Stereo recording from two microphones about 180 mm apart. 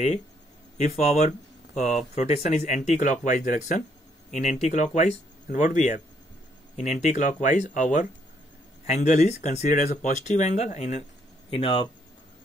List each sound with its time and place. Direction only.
0.7 s speech: 40° left (ahead or behind)